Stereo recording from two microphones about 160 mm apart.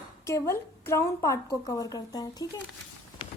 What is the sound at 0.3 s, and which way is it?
A woman's voice, 20° left (ahead or behind).